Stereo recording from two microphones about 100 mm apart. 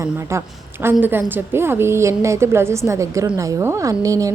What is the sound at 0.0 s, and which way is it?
A woman's voice, 30° right (ahead or behind).